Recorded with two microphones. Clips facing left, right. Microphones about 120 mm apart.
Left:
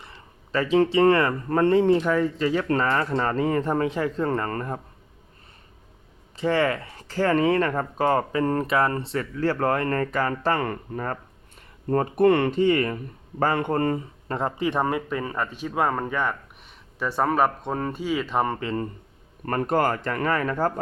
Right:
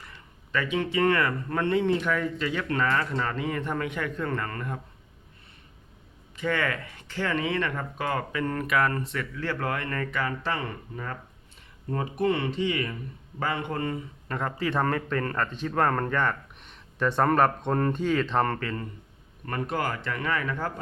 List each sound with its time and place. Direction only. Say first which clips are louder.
0.0 s speech: left 2 dB; 30° left (ahead or behind)
6.3 s speech: left 6 dB; 30° left (ahead or behind); by 14.0 s 45° left (ahead or behind)
14.3 s speech: left 4 dB; 30° left (ahead or behind); by 18.7 s 10° left (ahead or behind)
19.5 s speech: left 7 dB; 45° left (ahead or behind)